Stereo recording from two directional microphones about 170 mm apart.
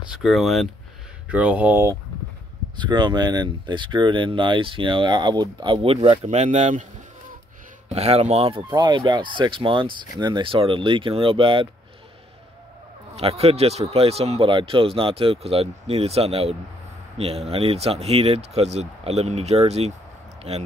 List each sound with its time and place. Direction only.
0.2 s speech: centre (ahead or behind)
2.8 s speech: 25° right (ahead or behind); by 7.3 s 50° right (ahead or behind)
7.9 s speech: 40° right (ahead or behind)
13.1 s speech: 35° right (ahead or behind)